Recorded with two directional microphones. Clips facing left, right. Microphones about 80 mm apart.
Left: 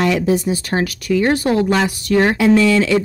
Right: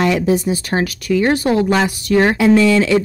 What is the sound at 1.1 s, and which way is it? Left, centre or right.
Speech, centre.